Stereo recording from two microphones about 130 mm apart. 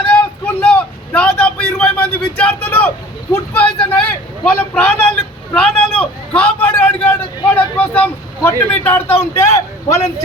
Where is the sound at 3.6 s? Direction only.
10° left (ahead or behind).